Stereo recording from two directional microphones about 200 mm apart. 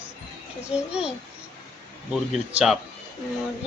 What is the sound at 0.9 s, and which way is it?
Speech, 5° right (ahead or behind).